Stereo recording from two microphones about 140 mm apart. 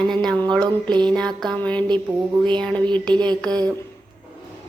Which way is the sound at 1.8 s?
30° right (ahead or behind).